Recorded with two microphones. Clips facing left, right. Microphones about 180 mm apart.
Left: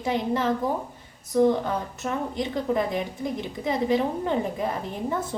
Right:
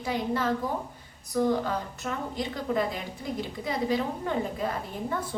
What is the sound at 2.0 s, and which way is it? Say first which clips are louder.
A woman's voice: left 4 dB; 20° left (ahead or behind).